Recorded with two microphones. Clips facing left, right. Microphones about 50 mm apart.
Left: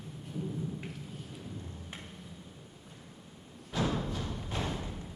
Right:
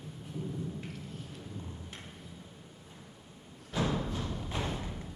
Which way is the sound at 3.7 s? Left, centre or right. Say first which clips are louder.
Even; centre.